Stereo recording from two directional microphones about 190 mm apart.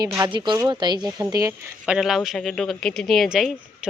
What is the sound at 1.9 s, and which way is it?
Speech, centre (ahead or behind).